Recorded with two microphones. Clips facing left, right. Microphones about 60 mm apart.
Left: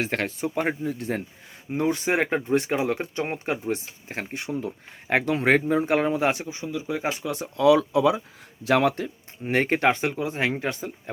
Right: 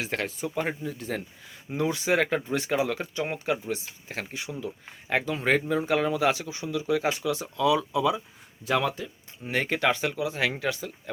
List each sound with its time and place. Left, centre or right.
0.0 s speech: left
4.6 s speech: left
7.3 s speech: left
7.9 s speech: left
8.6 s speech: left